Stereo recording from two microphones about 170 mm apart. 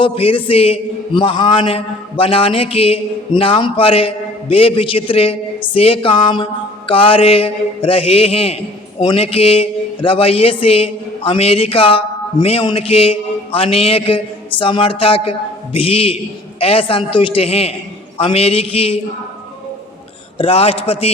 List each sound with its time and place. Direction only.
0.0 s a man's voice: 30° left (ahead or behind)
20.4 s a man's voice: 35° left (ahead or behind)